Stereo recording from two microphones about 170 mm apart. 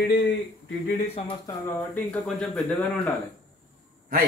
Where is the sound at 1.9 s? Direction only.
5° left (ahead or behind).